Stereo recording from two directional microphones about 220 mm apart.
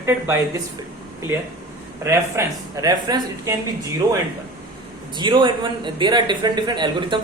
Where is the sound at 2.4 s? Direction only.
10° right (ahead or behind).